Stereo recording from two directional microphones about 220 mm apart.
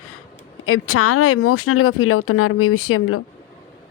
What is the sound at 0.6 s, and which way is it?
Speech, 80° left.